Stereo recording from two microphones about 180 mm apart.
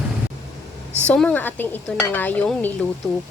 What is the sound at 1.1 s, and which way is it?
Speech, 5° left (ahead or behind).